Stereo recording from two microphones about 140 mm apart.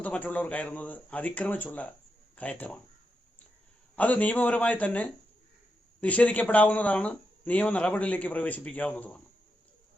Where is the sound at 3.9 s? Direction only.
10° left (ahead or behind).